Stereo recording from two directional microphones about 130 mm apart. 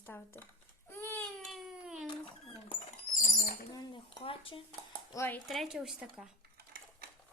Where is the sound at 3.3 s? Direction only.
90° left.